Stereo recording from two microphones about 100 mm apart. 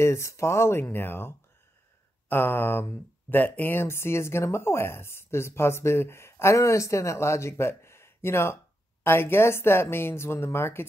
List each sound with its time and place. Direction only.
0.0 s speech: 30° left (ahead or behind)